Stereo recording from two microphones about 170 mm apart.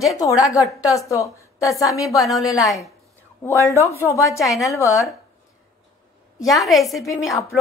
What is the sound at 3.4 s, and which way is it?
Speech, 15° left (ahead or behind).